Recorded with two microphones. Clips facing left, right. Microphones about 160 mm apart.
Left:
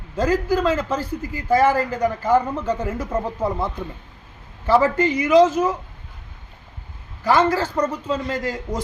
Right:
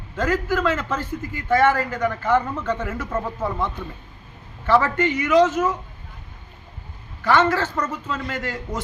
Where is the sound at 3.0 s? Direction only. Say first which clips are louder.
Left 2 dB; 15° left (ahead or behind).